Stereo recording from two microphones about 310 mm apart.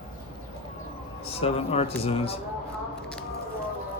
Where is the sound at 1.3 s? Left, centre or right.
Centre.